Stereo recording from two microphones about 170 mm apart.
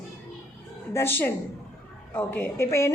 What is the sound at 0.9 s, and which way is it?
A woman's voice, 15° left (ahead or behind).